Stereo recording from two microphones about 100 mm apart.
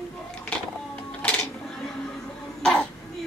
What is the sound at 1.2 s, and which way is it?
Music, 15° left (ahead or behind).